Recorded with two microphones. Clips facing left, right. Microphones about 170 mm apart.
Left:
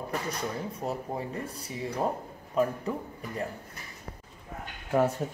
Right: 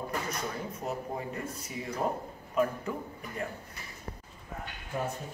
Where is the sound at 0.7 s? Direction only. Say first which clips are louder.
Left 2 dB; 35° left (ahead or behind).